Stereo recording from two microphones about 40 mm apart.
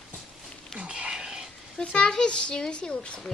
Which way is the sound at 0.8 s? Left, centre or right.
Right.